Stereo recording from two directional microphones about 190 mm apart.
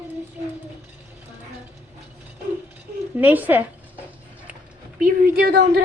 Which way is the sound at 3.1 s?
10° right (ahead or behind).